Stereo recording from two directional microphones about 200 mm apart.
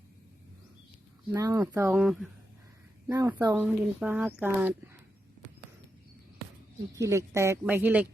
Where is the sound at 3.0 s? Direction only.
15° right (ahead or behind).